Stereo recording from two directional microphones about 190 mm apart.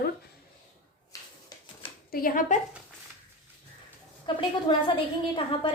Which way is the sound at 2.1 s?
50° left (ahead or behind).